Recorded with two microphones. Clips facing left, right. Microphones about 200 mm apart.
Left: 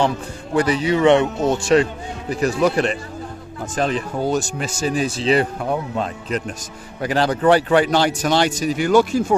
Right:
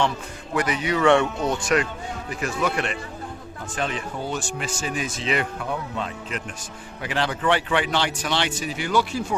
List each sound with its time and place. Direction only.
0.5 s speech: 30° left (ahead or behind)